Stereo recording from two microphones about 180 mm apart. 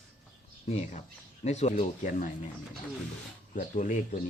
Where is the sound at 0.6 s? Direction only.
40° left (ahead or behind).